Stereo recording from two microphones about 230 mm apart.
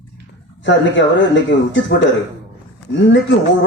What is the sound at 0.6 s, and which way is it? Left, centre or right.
Speech, left.